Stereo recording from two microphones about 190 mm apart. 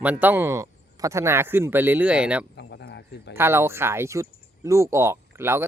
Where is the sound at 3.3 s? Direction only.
15° right (ahead or behind).